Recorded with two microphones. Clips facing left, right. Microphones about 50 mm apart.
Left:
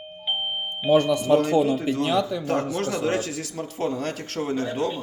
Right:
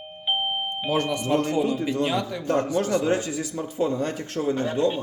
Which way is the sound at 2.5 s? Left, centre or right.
Left.